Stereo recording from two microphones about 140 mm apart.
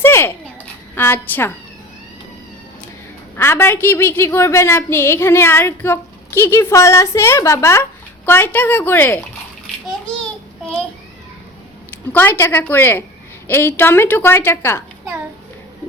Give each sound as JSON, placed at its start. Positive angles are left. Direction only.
{"t": 0.0, "sound": "a sound", "side_deg": 15}
{"t": 0.9, "sound": "a woman's voice", "side_deg": 15}
{"t": 3.3, "sound": "a woman's voice", "side_deg": 15}
{"t": 12.1, "sound": "a woman's voice", "side_deg": 15}